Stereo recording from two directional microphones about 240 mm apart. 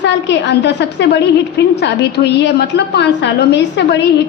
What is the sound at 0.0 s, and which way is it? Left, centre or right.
A woman's voice, left.